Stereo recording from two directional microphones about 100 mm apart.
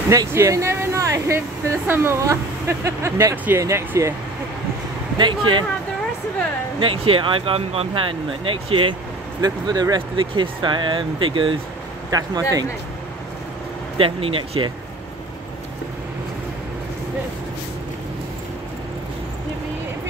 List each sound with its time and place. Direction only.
0.3 s speech: 30° right (ahead or behind)
5.1 s speech: 50° right (ahead or behind)
6.8 s speech: 65° right (ahead or behind)
9.4 s speech: 40° right (ahead or behind)
10.1 s speech: 55° right (ahead or behind)
12.1 s speech: 40° right (ahead or behind)
13.9 s speech: 65° right (ahead or behind)